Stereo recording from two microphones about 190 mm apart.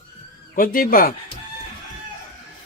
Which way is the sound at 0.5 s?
50° left (ahead or behind).